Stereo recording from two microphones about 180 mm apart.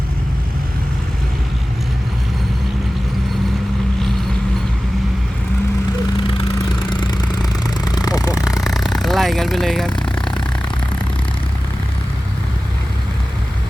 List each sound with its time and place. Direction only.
6.9 s a sound: 25° left (ahead or behind)
7.9 s vehicle: 20° left (ahead or behind)
8.4 s vehicle: centre (ahead or behind)